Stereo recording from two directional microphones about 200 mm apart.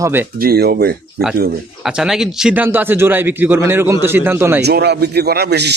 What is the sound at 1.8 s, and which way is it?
A man's voice, 5° right (ahead or behind).